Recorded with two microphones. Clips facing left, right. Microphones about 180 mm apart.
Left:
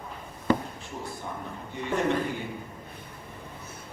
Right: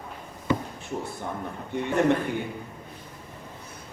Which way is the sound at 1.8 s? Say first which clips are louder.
Right 4 dB; 60° right (ahead or behind).